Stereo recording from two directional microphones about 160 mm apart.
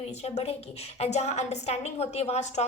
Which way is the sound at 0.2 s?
40° left (ahead or behind).